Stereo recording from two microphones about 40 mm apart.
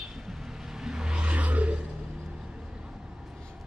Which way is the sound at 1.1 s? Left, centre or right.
Right.